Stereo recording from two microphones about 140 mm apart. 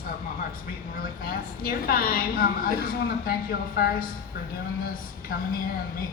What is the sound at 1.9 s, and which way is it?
Speech, 90° left.